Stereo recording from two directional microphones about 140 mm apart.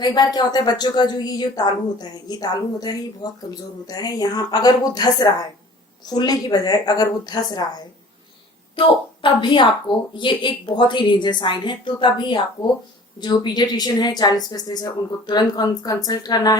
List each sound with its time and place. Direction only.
0.0 s a woman's voice: 30° left (ahead or behind)
9.2 s a woman's voice: 35° left (ahead or behind)